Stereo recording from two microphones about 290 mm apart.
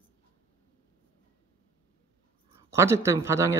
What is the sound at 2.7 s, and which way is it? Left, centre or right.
Speech, centre.